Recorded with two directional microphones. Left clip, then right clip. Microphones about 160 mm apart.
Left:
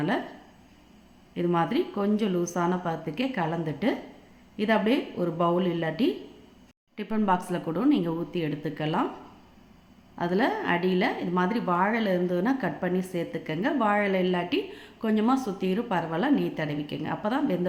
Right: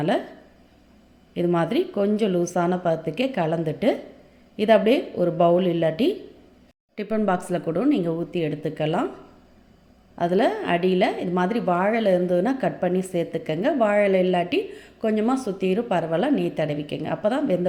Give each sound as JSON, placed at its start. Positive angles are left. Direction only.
{"t": 1.3, "sound": "a woman's voice", "side_deg": -20}
{"t": 10.2, "sound": "a woman's voice", "side_deg": -20}